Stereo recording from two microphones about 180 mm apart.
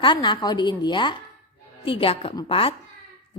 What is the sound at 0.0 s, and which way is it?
A woman's voice, 25° left (ahead or behind).